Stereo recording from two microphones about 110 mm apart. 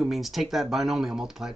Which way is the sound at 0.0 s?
Centre (ahead or behind).